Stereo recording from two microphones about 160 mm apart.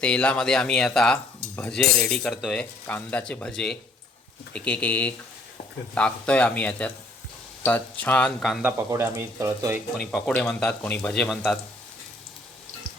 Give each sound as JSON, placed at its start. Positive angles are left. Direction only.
{"t": 0.0, "sound": "speech", "side_deg": 5}
{"t": 2.8, "sound": "speech", "side_deg": 10}
{"t": 8.6, "sound": "speech", "side_deg": -15}
{"t": 10.1, "sound": "speech", "side_deg": -5}
{"t": 10.3, "sound": "speech", "side_deg": 5}